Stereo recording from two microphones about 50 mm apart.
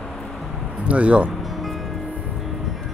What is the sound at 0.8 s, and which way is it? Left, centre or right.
Speech, right.